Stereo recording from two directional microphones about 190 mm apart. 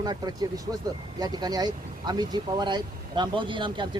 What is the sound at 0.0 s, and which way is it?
Speech, 20° right (ahead or behind).